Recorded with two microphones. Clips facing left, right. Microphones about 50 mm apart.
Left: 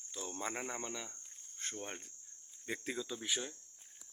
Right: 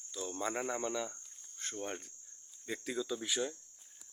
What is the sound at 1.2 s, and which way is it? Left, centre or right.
Cricket, left.